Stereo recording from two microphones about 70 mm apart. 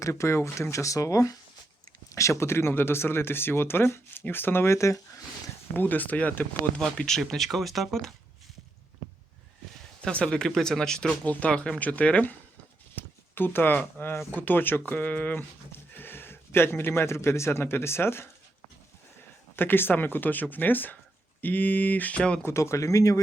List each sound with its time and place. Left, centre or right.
0.0 s speech: left
5.7 s speech: left
6.9 s speech: centre
10.0 s speech: centre
13.0 s speech: left
19.5 s speech: left
22.4 s speech: left